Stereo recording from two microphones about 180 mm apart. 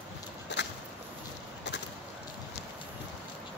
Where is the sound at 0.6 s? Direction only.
75° left (ahead or behind).